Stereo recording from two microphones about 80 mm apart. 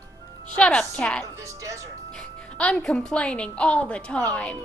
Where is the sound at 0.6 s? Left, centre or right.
Centre.